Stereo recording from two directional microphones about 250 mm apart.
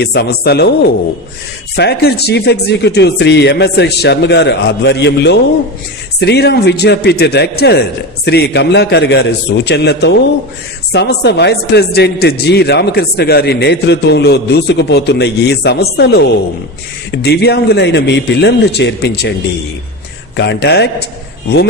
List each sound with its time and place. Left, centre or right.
0.0 s a man's voice: left
20.3 s speech: left